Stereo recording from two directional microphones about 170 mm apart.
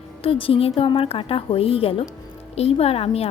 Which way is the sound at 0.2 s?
30° left (ahead or behind).